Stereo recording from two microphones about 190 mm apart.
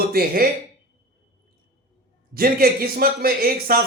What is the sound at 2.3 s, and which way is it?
A man's voice, 50° right (ahead or behind).